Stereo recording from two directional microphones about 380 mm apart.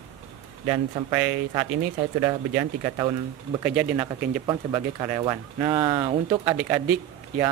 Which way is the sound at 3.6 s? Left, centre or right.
Centre.